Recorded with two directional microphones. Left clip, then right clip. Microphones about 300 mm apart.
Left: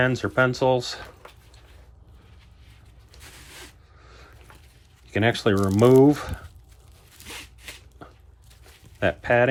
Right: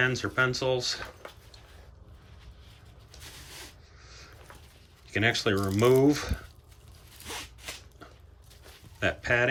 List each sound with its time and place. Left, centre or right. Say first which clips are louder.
0.0 s speech: left 5 dB; centre
4.0 s a sound: left 1 dB; centre
5.0 s speech: left 4 dB; centre
7.3 s zipper: even; centre
9.0 s speech: left 6 dB; centre